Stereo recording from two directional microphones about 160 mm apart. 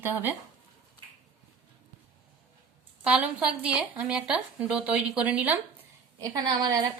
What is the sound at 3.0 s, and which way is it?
Speech, 5° right (ahead or behind).